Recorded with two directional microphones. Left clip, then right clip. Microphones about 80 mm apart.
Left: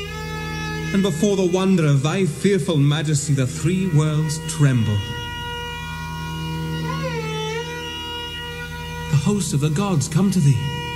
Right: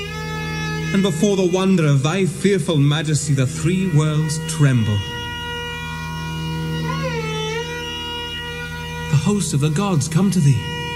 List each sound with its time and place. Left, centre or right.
0.9 s a man's voice: right
6.9 s music: right
9.1 s a man's voice: right